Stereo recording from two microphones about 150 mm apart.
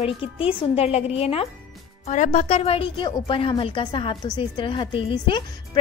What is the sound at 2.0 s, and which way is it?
A woman's voice, 55° left (ahead or behind).